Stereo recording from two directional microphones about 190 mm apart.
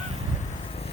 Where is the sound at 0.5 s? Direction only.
30° left (ahead or behind).